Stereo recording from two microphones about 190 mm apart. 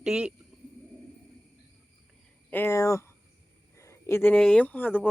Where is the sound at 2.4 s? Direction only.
10° left (ahead or behind).